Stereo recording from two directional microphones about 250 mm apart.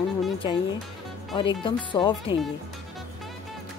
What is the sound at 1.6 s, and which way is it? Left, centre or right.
Speech, centre.